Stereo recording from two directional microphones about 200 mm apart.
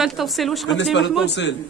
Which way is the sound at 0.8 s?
65° left (ahead or behind).